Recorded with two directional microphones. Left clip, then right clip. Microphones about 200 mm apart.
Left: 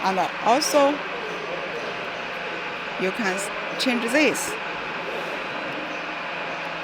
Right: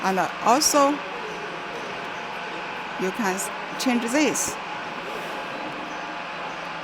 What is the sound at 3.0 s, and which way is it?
Speech, 10° right (ahead or behind).